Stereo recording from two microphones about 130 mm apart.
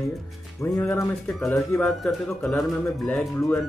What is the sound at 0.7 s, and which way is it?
Speech, 15° left (ahead or behind).